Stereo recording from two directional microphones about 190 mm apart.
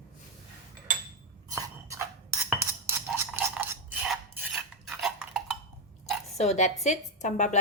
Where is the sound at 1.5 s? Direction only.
15° right (ahead or behind).